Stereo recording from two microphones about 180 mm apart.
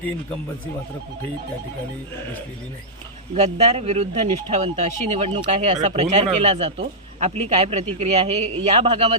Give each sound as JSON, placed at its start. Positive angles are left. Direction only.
{"t": 3.3, "sound": "speech", "side_deg": -35}